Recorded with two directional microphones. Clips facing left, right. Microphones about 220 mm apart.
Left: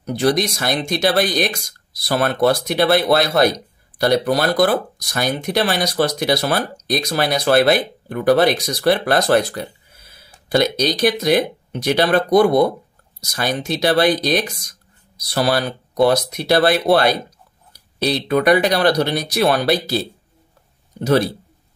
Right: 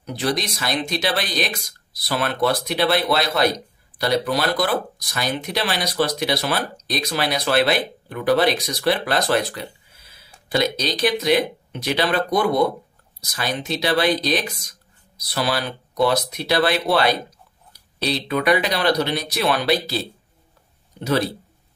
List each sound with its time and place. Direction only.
0.0 s speech: 45° left (ahead or behind)